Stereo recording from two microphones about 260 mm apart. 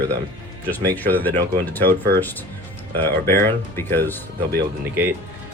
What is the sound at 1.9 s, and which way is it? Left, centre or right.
Speech, right.